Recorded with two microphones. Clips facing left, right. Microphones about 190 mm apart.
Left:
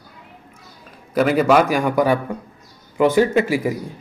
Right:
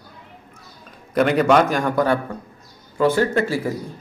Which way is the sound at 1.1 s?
5° left (ahead or behind).